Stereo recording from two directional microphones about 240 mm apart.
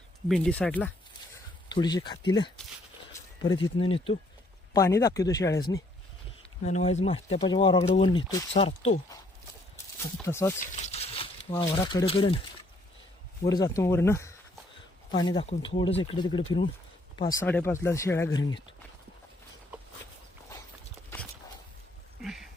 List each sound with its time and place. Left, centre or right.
0.3 s speech: centre
1.7 s speech: centre
6.6 s speech: left
10.2 s speech: centre
10.6 s a sound: left
11.7 s speech: centre
13.4 s speech: centre
17.4 s speech: centre
22.2 s a sound: centre